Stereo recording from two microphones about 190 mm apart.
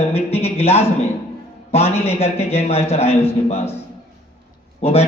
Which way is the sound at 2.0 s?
30° left (ahead or behind).